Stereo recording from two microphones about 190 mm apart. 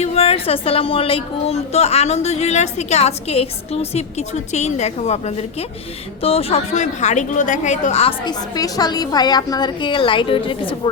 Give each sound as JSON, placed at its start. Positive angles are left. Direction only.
{"t": 0.0, "sound": "a woman's voice", "side_deg": 35}